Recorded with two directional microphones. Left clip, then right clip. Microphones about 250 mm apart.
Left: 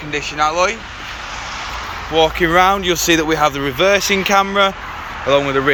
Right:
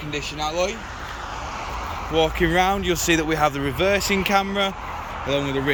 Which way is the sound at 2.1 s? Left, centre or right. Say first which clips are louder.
Left 7 dB; centre.